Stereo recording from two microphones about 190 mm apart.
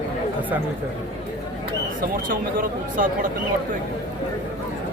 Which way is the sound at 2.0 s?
45° right (ahead or behind).